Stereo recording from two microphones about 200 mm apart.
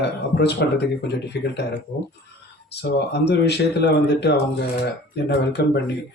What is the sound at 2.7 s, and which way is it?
Speech, 55° left (ahead or behind).